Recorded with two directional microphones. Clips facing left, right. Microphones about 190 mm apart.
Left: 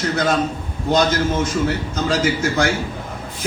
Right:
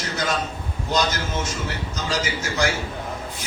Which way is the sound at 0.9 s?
55° left (ahead or behind).